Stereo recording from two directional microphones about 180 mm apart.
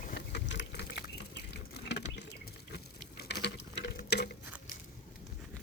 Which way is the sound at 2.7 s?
65° left (ahead or behind).